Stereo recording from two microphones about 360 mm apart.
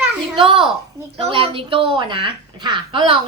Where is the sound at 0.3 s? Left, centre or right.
Centre.